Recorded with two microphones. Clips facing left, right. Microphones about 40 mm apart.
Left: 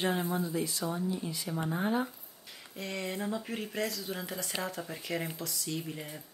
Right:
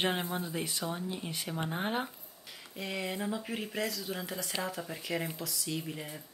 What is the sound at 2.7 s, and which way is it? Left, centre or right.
Speech, centre.